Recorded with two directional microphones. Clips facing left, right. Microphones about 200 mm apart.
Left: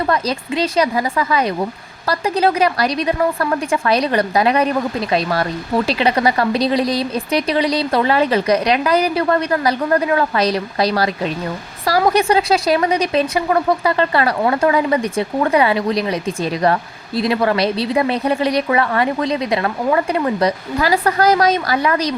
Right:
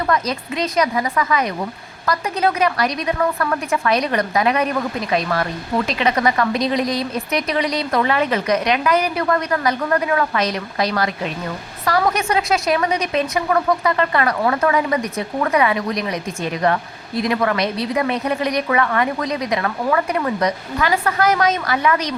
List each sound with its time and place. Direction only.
0.1 s a woman's voice: 30° left (ahead or behind)